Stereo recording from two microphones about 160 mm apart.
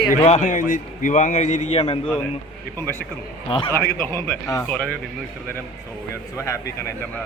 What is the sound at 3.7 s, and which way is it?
Speech, 15° left (ahead or behind).